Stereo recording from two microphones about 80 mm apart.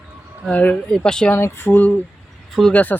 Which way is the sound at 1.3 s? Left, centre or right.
Left.